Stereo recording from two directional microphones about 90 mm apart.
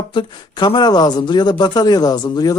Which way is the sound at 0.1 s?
60° left (ahead or behind).